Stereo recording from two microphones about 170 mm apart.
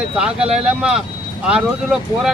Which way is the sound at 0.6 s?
5° right (ahead or behind).